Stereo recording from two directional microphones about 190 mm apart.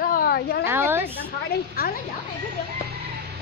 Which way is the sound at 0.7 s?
10° right (ahead or behind).